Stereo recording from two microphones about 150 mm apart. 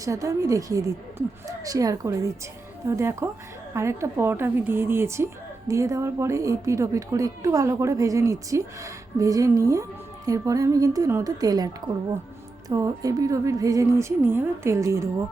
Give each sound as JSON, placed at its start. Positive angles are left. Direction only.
{"t": 0.0, "sound": "a woman's voice", "side_deg": -20}